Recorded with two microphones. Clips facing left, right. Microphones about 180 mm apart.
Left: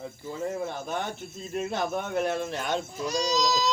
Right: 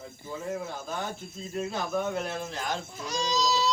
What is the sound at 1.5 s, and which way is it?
Speech, 65° left (ahead or behind).